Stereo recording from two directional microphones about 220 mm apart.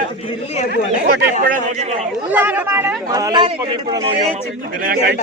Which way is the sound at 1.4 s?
35° right (ahead or behind).